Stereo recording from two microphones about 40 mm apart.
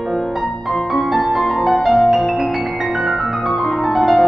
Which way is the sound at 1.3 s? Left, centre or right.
Centre.